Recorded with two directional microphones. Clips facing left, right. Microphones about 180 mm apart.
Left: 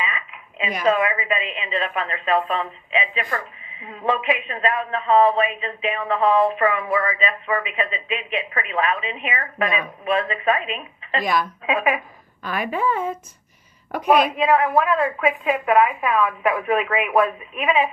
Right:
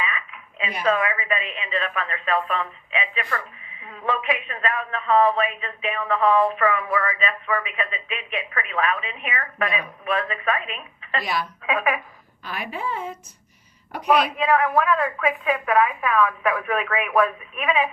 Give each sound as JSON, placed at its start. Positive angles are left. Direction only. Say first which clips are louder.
{"t": 0.9, "sound": "a woman's voice", "louder": "left 3 dB", "side_deg": 25}
{"t": 12.4, "sound": "a woman's voice", "louder": "left 7 dB", "side_deg": 50}
{"t": 14.3, "sound": "a woman's voice", "louder": "left 2 dB", "side_deg": 25}